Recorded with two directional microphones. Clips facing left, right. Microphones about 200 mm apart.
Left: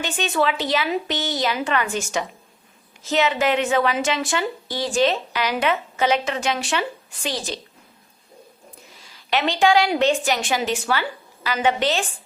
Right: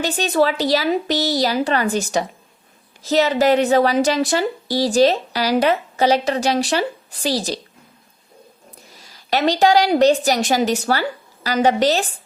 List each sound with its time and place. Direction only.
0.0 s a woman's voice: 40° right (ahead or behind)
9.0 s a woman's voice: 40° right (ahead or behind)